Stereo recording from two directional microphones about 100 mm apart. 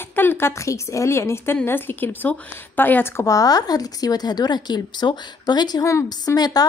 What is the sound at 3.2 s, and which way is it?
A woman's voice, 35° left (ahead or behind).